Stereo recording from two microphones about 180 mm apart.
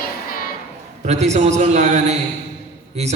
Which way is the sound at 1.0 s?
40° right (ahead or behind).